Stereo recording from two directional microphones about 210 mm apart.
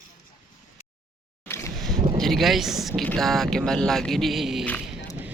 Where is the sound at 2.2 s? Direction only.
Centre (ahead or behind).